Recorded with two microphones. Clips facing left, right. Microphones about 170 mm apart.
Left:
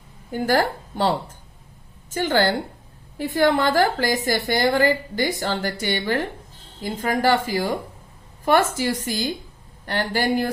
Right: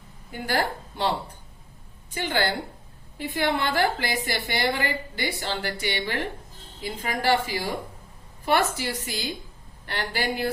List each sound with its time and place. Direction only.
0.3 s a woman's voice: 45° left (ahead or behind)